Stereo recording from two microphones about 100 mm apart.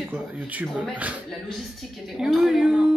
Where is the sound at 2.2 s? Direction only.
5° right (ahead or behind).